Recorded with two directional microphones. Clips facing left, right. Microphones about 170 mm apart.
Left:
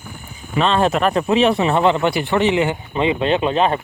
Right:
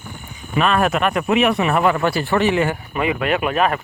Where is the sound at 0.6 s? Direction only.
25° left (ahead or behind).